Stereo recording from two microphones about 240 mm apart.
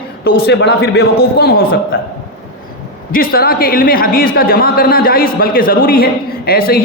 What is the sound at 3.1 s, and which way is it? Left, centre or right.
A man's voice, left.